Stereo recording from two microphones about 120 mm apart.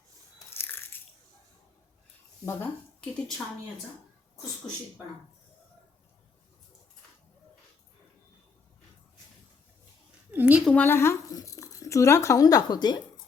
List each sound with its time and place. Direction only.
0.5 s biting: 20° left (ahead or behind)
2.4 s speech: 20° left (ahead or behind)
3.0 s a woman's voice: 5° left (ahead or behind)
10.3 s a sound: 10° right (ahead or behind)
10.7 s speech: 15° left (ahead or behind); by 13.0 s 35° left (ahead or behind)